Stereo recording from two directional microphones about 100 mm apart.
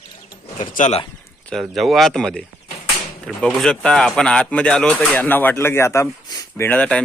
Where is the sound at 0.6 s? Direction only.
65° left (ahead or behind).